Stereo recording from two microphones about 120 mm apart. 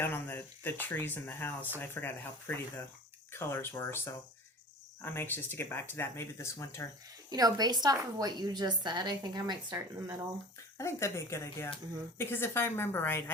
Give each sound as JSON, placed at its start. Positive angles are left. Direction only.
{"t": 0.0, "sound": "speech", "side_deg": 15}
{"t": 7.3, "sound": "a woman's voice", "side_deg": -30}
{"t": 10.8, "sound": "speech", "side_deg": 25}